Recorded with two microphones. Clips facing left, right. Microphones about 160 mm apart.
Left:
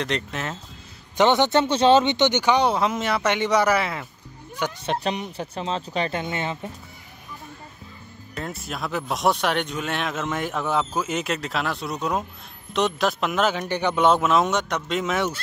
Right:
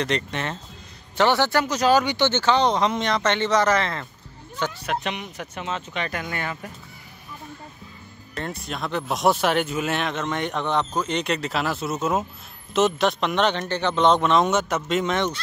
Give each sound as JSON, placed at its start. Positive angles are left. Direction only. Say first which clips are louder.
{"t": 0.0, "sound": "speech", "louder": "right 2 dB", "side_deg": 0}
{"t": 1.1, "sound": "speech", "louder": "left 2 dB", "side_deg": 20}
{"t": 4.8, "sound": "speech", "louder": "left 2 dB", "side_deg": 35}
{"t": 8.4, "sound": "speech", "louder": "right 1 dB", "side_deg": 0}